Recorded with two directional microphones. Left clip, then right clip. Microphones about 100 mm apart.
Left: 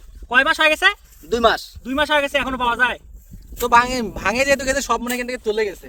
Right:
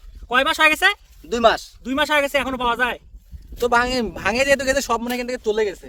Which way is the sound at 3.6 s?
35° right (ahead or behind).